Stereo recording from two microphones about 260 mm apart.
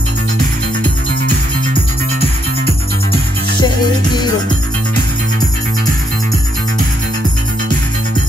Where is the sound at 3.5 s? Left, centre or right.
Centre.